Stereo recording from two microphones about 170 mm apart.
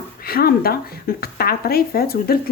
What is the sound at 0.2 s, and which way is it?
Speech, 60° left (ahead or behind).